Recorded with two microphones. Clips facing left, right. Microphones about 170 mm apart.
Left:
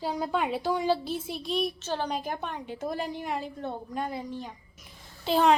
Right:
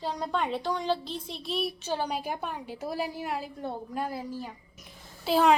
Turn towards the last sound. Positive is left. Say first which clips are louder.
# even
turn(degrees=-5)  # may be behind; listen again after turning